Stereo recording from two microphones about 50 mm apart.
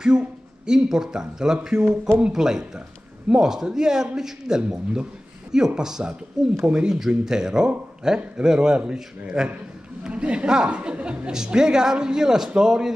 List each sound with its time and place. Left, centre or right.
0.0 s a man's voice: centre
10.0 s speech: right